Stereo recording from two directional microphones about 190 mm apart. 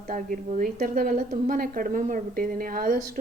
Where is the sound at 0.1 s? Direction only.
45° right (ahead or behind).